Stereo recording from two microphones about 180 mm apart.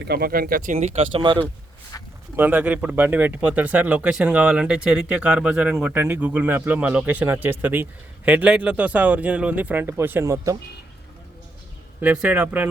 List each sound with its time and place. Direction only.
0.0 s speech: 60° right (ahead or behind); by 1.5 s 25° right (ahead or behind)
2.3 s speech: 10° right (ahead or behind)
11.9 s speech: 5° right (ahead or behind)